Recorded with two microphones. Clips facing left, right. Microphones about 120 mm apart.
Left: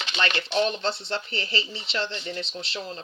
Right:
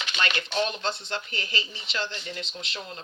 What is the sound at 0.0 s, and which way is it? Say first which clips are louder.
Speech: left 2 dB; 30° left (ahead or behind).